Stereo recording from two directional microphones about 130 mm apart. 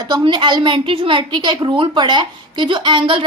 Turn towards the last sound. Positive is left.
turn(degrees=-40)  # may be behind; listen again after turning